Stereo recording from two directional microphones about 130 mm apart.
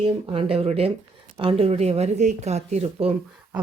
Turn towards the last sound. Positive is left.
turn(degrees=-55)  # may be behind; listen again after turning